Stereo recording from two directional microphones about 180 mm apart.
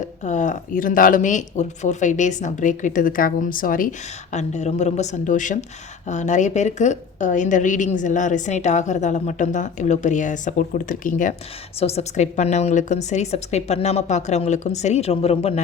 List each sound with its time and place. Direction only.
0.3 s a woman's voice: 40° left (ahead or behind)
4.3 s a woman's voice: 40° left (ahead or behind)
11.8 s a woman's voice: 35° left (ahead or behind)